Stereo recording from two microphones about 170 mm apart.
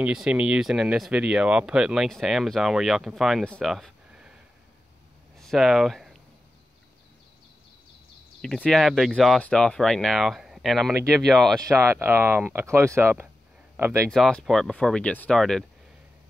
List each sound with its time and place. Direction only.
0.0 s speech: 5° right (ahead or behind)
5.4 s speech: centre (ahead or behind)
8.4 s speech: 5° left (ahead or behind)
11.6 s speech: 15° right (ahead or behind)
14.1 s speech: centre (ahead or behind)